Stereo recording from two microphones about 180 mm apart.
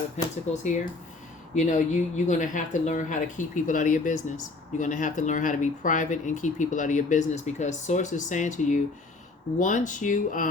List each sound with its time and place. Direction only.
0.2 s speech: 40° left (ahead or behind)
1.5 s speech: 45° left (ahead or behind)